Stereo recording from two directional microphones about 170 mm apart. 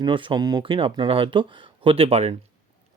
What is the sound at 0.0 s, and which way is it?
Speech, 30° right (ahead or behind).